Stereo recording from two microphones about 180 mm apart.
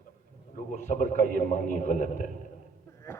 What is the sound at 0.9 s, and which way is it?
A man's voice, 45° left (ahead or behind).